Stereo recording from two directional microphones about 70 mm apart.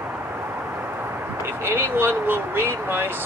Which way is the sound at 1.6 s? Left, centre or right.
Right.